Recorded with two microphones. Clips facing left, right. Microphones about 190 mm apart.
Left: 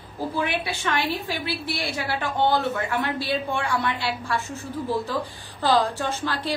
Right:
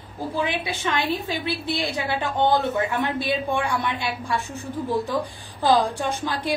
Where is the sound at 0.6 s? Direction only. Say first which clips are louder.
Right 1 dB; 15° right (ahead or behind).